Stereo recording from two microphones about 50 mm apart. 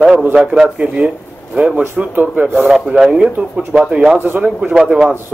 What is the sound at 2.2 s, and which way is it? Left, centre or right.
Speech, right.